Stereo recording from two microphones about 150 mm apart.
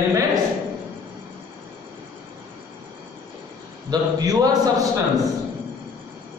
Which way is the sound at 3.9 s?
25° right (ahead or behind).